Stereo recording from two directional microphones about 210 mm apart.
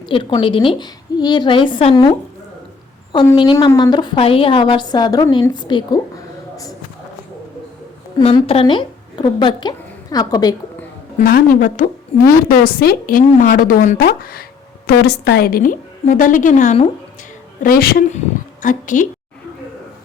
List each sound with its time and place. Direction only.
0.1 s a woman's voice: 25° left (ahead or behind)
8.2 s a woman's voice: 25° left (ahead or behind)
11.2 s a woman's voice: 40° left (ahead or behind)
17.6 s a woman's voice: 45° left (ahead or behind)